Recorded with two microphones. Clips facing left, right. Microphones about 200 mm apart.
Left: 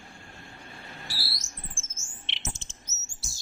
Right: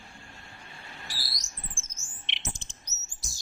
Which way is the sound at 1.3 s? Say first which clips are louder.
Left 3 dB; 20° right (ahead or behind).